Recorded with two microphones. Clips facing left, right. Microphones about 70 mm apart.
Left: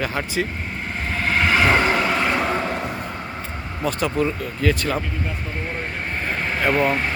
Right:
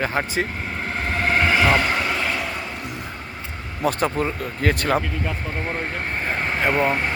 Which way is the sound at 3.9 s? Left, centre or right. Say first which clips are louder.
Even; right.